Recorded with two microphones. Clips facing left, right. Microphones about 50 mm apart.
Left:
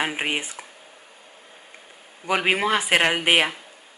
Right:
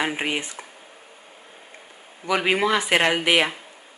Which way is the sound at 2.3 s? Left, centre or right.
Centre.